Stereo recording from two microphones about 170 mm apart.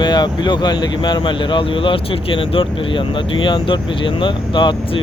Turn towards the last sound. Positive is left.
turn(degrees=25)  # may be behind; listen again after turning